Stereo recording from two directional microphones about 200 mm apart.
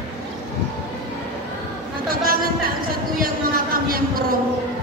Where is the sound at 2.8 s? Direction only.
45° right (ahead or behind).